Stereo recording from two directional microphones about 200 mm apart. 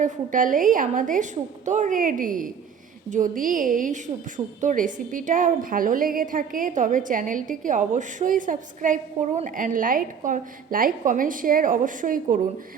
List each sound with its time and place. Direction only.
0.0 s a woman's voice: 40° right (ahead or behind)